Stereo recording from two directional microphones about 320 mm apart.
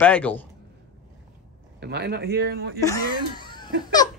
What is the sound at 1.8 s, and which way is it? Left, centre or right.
Speech, right.